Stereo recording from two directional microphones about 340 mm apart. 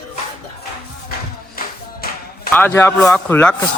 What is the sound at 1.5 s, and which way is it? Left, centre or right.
Music, left.